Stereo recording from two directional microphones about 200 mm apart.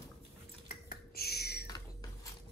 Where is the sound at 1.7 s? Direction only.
20° left (ahead or behind).